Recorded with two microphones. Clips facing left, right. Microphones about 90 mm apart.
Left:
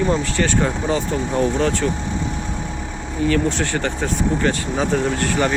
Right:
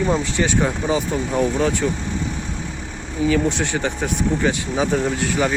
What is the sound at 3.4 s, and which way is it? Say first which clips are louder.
Speech: even; 15° right (ahead or behind).